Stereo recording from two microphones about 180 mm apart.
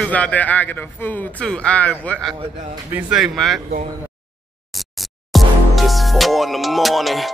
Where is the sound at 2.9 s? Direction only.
5° right (ahead or behind).